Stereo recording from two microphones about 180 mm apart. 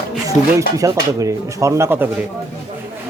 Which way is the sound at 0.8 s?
20° right (ahead or behind).